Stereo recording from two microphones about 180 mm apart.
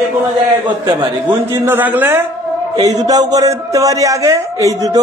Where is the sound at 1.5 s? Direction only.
15° right (ahead or behind).